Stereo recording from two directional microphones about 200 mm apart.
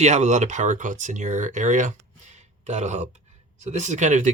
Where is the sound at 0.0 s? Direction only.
35° right (ahead or behind).